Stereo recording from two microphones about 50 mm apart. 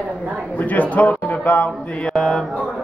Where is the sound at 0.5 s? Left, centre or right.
Left.